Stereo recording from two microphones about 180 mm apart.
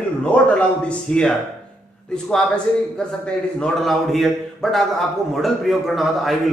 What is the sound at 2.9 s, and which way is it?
A man's voice, 5° left (ahead or behind).